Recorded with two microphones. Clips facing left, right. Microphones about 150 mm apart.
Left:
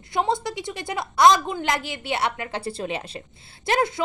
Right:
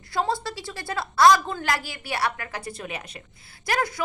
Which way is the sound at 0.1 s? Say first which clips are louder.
Left 2 dB; 20° left (ahead or behind).